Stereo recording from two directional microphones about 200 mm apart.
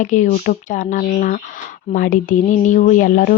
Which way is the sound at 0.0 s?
40° left (ahead or behind).